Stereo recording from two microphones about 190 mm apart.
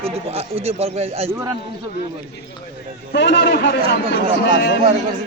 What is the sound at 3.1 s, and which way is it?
A man's voice, 70° left (ahead or behind).